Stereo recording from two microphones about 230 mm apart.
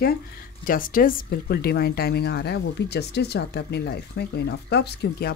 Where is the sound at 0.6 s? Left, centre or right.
Left.